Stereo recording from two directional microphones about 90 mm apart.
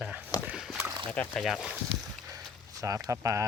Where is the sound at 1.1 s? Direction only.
15° left (ahead or behind).